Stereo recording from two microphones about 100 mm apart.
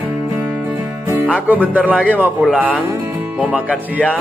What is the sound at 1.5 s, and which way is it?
A man's voice, 15° right (ahead or behind).